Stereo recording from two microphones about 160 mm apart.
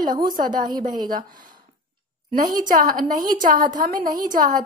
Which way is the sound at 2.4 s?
60° right (ahead or behind).